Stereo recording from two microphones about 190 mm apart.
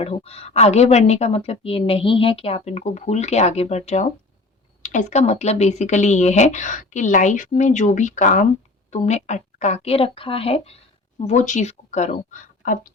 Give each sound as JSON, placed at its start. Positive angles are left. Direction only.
{"t": 0.0, "sound": "a woman's voice", "side_deg": 30}